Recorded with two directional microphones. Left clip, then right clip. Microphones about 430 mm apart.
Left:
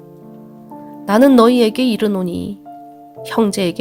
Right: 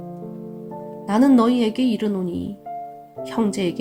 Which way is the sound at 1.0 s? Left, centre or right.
Centre.